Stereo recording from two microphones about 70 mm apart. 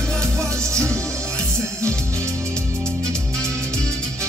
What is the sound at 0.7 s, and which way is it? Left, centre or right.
Music, right.